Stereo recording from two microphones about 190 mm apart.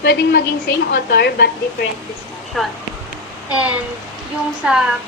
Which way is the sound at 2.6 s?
Centre (ahead or behind).